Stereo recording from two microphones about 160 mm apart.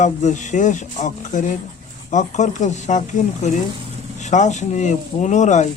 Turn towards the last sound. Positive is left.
turn(degrees=50)  # may be behind; listen again after turning